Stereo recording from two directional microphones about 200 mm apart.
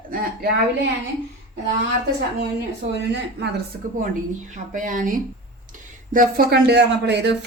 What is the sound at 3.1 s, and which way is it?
Speech, 60° right (ahead or behind).